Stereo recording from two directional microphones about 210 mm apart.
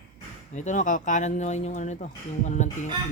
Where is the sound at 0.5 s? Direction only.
35° left (ahead or behind).